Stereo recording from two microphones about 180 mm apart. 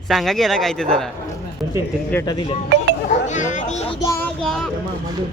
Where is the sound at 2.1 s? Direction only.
15° left (ahead or behind).